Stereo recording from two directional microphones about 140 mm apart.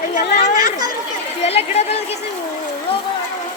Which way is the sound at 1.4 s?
50° left (ahead or behind).